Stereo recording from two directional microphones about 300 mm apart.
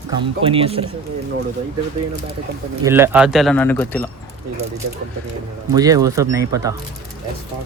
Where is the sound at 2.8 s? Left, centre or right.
Centre.